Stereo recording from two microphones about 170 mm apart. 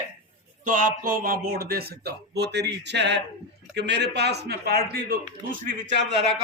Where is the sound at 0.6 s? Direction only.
50° right (ahead or behind).